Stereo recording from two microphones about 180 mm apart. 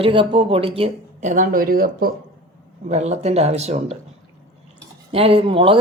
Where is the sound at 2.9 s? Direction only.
40° right (ahead or behind).